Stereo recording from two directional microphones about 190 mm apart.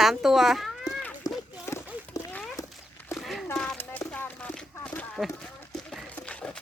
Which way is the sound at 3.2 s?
Centre (ahead or behind).